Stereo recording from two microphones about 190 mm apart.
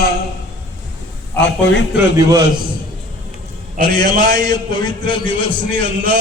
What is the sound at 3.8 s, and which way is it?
A man's voice, 25° left (ahead or behind).